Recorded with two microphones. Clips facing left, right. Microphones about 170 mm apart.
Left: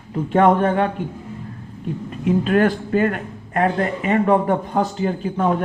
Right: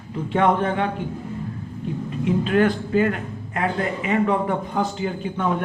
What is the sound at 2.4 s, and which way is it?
Speech, 45° left (ahead or behind).